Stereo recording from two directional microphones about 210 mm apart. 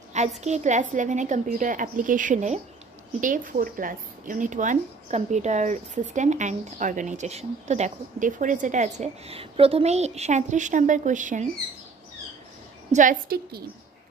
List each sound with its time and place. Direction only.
0.1 s a woman's voice: 30° right (ahead or behind)
12.9 s a woman's voice: 40° right (ahead or behind)